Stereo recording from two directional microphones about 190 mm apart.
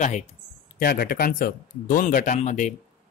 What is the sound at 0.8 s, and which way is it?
Speech, 50° left (ahead or behind).